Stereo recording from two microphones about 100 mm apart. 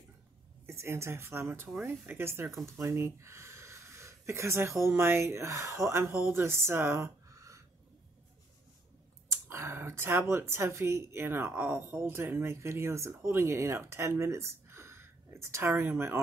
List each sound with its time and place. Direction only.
0.7 s speech: 25° right (ahead or behind)
9.3 s speech: 30° right (ahead or behind)